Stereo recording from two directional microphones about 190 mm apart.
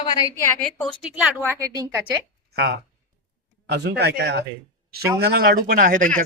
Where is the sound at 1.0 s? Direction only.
5° right (ahead or behind).